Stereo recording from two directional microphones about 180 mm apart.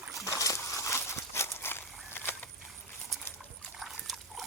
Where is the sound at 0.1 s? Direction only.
20° left (ahead or behind).